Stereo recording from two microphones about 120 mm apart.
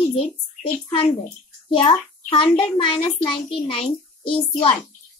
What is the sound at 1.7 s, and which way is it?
A child's voice, 50° left (ahead or behind).